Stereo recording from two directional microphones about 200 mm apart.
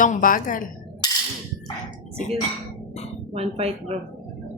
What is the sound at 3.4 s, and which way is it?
Speech, 30° right (ahead or behind).